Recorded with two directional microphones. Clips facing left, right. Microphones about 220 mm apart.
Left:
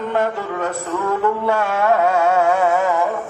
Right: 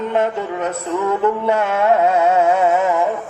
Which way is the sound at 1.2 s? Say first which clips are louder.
Right 1 dB; 20° right (ahead or behind).